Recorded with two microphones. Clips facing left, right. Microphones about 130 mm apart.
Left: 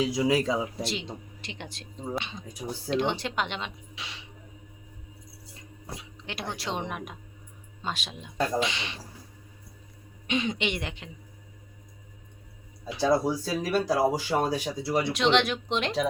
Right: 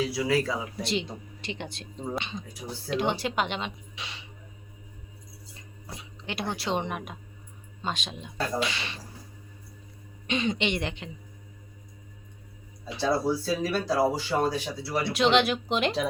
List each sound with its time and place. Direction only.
0.0 s speech: 15° left (ahead or behind)
0.8 s speech: centre (ahead or behind)
2.9 s speech: 10° right (ahead or behind)
6.0 s speech: centre (ahead or behind)
8.6 s speech: 20° left (ahead or behind)
10.2 s speech: 5° left (ahead or behind)
12.8 s speech: 15° left (ahead or behind)
15.1 s speech: 5° right (ahead or behind)